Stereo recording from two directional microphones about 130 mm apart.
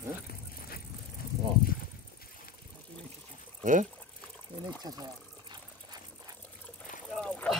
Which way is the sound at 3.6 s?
90° right.